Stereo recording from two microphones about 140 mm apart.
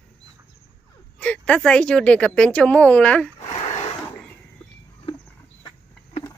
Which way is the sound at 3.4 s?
50° left (ahead or behind).